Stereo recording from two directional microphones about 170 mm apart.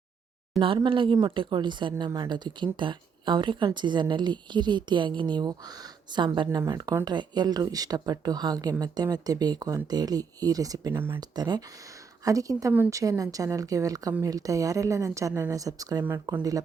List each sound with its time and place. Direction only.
0.6 s a woman's voice: 30° right (ahead or behind)